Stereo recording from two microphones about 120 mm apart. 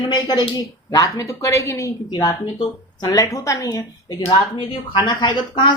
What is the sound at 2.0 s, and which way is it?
A woman's voice, 35° left (ahead or behind).